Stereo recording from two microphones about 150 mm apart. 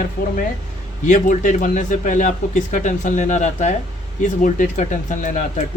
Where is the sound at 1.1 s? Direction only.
60° left (ahead or behind).